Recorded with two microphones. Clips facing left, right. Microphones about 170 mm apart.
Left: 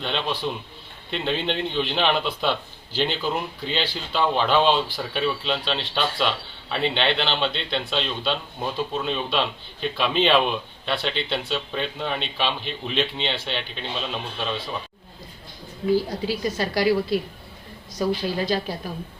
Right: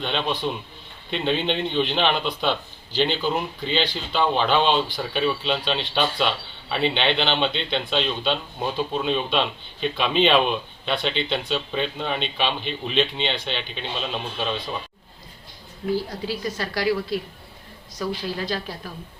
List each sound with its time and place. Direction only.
0.0 s a man's voice: centre (ahead or behind)
16.6 s a woman's voice: 20° left (ahead or behind)
18.0 s a woman's voice: 15° left (ahead or behind)